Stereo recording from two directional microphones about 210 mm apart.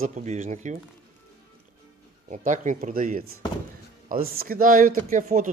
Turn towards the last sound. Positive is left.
turn(degrees=-40)  # may be behind; listen again after turning